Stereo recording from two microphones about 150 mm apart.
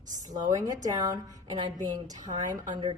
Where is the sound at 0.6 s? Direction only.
25° right (ahead or behind).